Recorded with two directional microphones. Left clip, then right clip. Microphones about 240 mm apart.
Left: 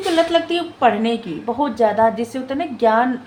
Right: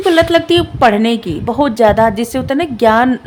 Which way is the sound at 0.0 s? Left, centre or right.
Right.